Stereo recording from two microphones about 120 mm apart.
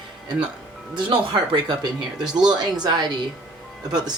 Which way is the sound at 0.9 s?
45° right (ahead or behind).